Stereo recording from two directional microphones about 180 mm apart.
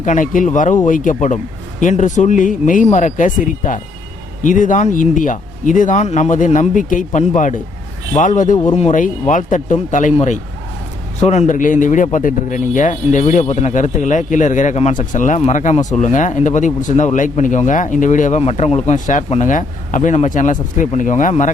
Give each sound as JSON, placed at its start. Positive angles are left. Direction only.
{"t": 0.0, "sound": "speech", "side_deg": 45}